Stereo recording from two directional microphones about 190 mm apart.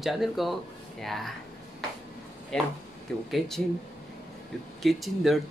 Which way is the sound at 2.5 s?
5° left (ahead or behind).